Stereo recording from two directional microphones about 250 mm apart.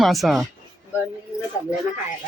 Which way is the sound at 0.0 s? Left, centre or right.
Centre.